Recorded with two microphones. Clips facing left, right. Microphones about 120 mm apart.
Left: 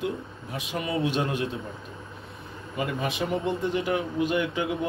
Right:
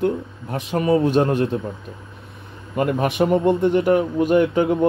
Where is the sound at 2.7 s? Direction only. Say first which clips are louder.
Right 10 dB; 60° right (ahead or behind).